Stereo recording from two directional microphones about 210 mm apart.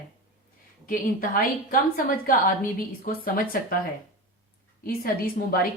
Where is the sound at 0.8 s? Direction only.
40° left (ahead or behind).